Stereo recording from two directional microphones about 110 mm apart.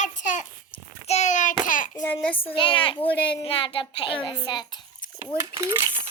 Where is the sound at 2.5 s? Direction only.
50° left (ahead or behind).